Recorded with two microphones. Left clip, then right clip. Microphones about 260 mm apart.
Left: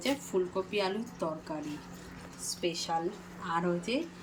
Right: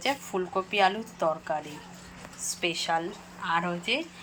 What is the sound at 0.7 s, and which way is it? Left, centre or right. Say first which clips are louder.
Speech: right 8 dB; centre.